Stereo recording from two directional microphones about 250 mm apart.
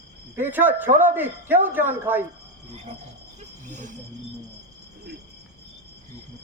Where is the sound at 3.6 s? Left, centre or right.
Right.